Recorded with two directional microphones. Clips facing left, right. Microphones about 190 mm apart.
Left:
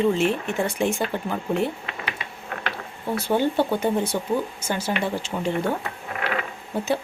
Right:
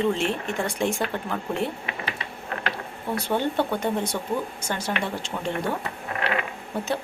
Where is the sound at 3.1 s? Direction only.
5° left (ahead or behind).